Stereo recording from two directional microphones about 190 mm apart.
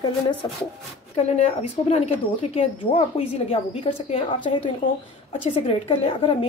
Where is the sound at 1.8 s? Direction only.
35° left (ahead or behind).